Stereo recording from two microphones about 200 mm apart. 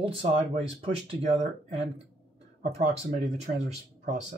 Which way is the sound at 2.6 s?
35° right (ahead or behind).